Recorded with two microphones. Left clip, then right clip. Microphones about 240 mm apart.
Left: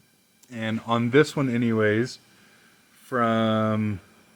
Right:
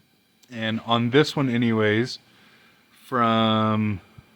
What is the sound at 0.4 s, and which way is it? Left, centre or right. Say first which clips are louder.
Speech: right 2 dB; centre.